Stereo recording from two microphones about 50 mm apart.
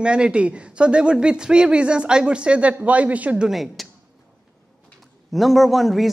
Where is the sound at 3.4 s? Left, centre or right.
Centre.